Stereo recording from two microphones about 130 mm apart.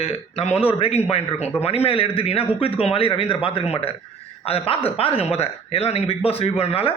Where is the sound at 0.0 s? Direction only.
50° left (ahead or behind).